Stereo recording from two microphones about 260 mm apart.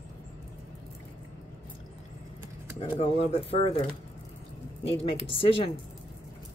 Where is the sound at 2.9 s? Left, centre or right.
Left.